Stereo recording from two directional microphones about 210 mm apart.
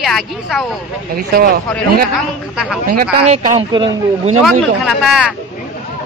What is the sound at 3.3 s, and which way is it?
Speech, 20° right (ahead or behind).